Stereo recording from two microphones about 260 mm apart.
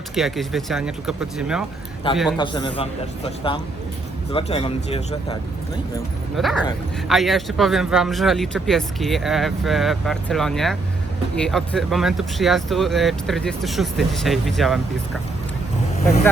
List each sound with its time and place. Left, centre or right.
0.2 s speech: centre
2.0 s a man's voice: left
6.3 s speech: centre